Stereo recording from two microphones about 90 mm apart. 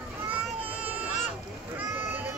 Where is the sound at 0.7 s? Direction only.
15° right (ahead or behind).